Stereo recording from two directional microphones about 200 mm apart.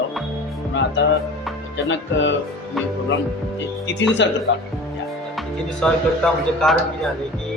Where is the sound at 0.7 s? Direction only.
65° left (ahead or behind).